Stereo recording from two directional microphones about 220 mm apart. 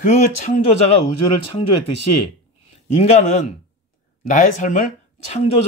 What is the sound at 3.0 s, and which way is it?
Speech, 30° left (ahead or behind).